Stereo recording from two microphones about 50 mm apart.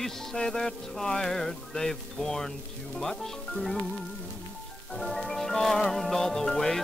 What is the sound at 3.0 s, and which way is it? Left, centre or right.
Music, centre.